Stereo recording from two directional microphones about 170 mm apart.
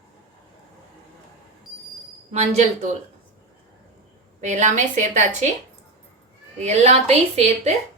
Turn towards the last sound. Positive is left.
turn(degrees=-40)  # may be behind; listen again after turning